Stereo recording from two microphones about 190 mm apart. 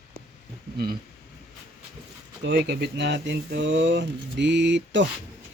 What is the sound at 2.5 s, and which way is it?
Speech, 65° right (ahead or behind).